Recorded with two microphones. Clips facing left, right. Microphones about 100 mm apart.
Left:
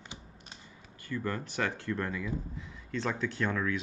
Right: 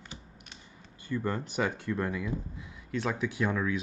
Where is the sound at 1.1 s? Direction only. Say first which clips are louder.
Right 3 dB; 15° right (ahead or behind).